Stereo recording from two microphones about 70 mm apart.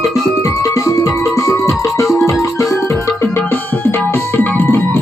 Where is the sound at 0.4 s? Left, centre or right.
Left.